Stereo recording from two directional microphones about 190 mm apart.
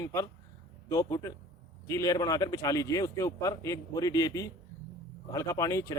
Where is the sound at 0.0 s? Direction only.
15° left (ahead or behind).